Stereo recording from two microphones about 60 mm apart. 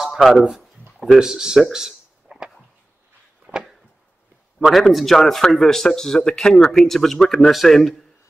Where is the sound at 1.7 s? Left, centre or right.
Centre.